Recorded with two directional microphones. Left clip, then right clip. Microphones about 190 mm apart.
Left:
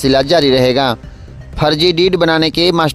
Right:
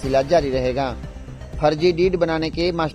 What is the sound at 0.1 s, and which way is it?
Speech, 45° left (ahead or behind).